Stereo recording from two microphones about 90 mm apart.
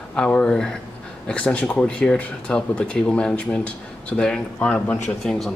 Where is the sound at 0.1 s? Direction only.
10° left (ahead or behind).